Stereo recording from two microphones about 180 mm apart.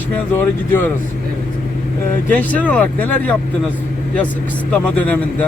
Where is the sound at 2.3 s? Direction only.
10° left (ahead or behind).